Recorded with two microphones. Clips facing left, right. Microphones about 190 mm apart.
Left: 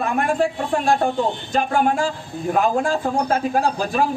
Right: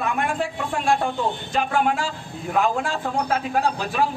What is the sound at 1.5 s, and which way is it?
Speech, 35° left (ahead or behind).